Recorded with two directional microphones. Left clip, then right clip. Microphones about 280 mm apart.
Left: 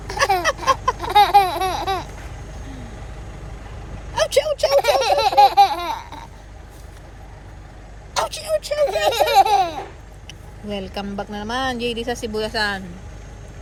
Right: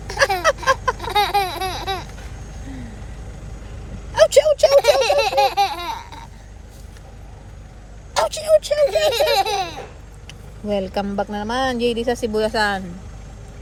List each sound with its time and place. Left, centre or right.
0.2 s a sound: right
0.9 s baby laughter: centre
4.1 s vehicle: right
4.8 s baby laughter: centre
8.1 s a sound: right
8.9 s laughter: centre
10.2 s speech: right